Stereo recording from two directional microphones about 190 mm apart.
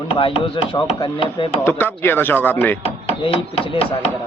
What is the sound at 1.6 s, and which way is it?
A man's voice, 10° left (ahead or behind).